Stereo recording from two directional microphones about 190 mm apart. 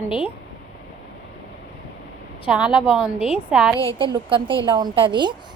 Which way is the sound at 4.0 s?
25° right (ahead or behind).